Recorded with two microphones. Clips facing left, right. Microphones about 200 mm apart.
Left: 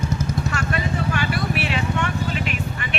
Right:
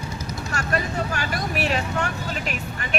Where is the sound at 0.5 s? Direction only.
40° right (ahead or behind).